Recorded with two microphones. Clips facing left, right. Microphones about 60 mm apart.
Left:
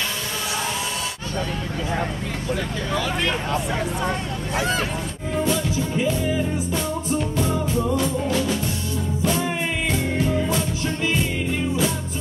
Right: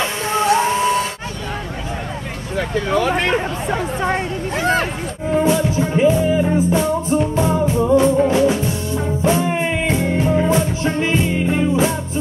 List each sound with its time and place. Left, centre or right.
0.6 s music: right
2.9 s speech: right
5.4 s music: right